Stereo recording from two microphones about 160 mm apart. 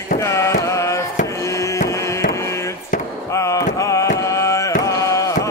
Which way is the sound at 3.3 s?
20° left (ahead or behind).